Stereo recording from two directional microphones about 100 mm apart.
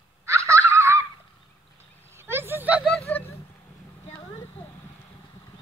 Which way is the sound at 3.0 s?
15° left (ahead or behind).